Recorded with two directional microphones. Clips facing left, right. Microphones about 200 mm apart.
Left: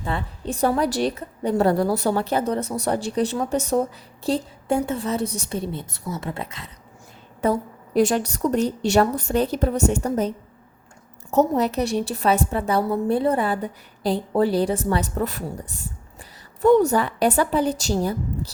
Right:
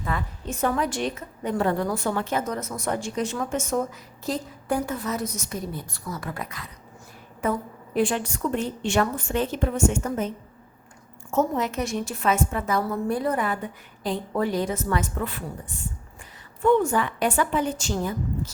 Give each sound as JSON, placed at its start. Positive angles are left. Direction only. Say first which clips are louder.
{"t": 0.0, "sound": "a woman's voice", "louder": "left 2 dB", "side_deg": 30}
{"t": 7.4, "sound": "a woman's voice", "louder": "left 4 dB", "side_deg": 40}
{"t": 16.6, "sound": "a woman's voice", "louder": "left 4 dB", "side_deg": 40}